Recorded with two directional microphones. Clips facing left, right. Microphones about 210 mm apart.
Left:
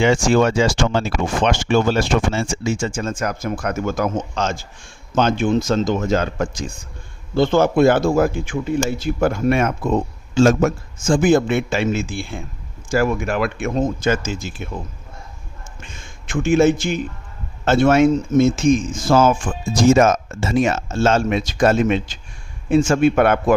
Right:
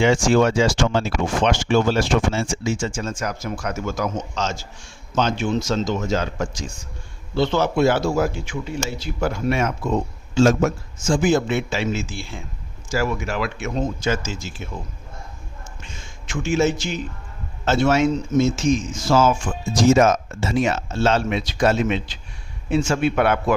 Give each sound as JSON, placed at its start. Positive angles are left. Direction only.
{"t": 0.0, "sound": "speech", "side_deg": 55}
{"t": 15.8, "sound": "a man's voice", "side_deg": 55}